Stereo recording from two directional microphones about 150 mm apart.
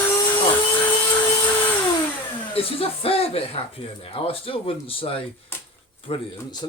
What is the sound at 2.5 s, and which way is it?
A man's voice, 40° left (ahead or behind).